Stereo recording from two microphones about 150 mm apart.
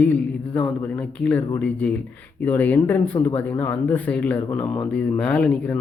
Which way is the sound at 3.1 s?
25° left (ahead or behind).